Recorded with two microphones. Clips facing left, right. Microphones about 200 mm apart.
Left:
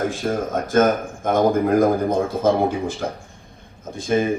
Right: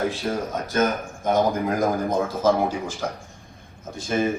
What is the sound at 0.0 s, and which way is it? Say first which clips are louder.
A man's voice: left 3 dB; 50° left (ahead or behind).